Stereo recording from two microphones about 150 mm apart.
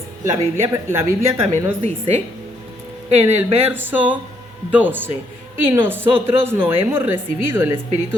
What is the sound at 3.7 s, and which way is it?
Speech, 15° right (ahead or behind).